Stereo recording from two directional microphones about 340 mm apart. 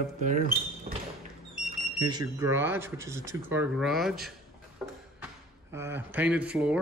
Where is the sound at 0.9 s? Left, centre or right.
Right.